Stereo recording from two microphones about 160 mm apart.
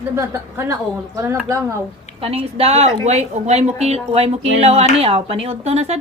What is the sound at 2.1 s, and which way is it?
A woman's voice, 35° right (ahead or behind).